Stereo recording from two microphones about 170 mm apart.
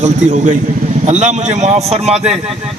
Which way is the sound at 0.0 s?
45° right (ahead or behind).